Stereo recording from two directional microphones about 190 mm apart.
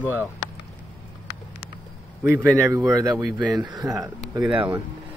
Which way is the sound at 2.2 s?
10° right (ahead or behind).